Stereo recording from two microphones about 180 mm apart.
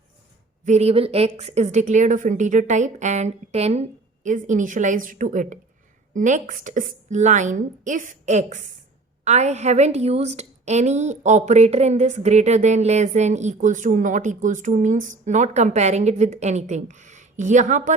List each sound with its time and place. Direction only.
0.6 s a woman's voice: 40° right (ahead or behind)